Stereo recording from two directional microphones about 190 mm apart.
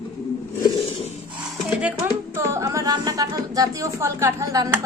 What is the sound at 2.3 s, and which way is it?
A woman's voice, 15° right (ahead or behind).